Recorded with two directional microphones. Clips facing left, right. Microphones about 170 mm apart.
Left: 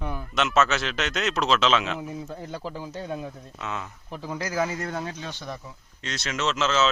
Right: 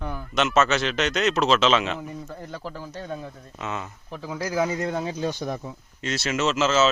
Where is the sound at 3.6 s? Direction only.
Centre (ahead or behind).